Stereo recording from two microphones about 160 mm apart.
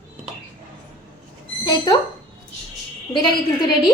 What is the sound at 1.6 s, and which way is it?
Owl, 30° left (ahead or behind).